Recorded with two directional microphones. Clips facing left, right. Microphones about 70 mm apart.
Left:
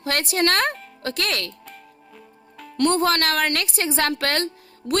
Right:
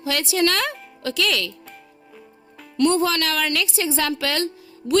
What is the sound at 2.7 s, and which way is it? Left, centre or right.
Speech, left.